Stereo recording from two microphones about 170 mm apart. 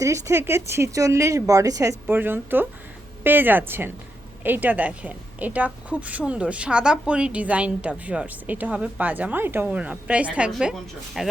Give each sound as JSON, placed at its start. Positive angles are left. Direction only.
{"t": 0.0, "sound": "a woman's voice", "side_deg": -15}